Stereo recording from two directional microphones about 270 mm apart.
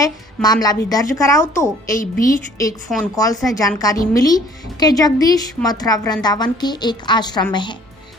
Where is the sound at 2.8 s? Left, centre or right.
Centre.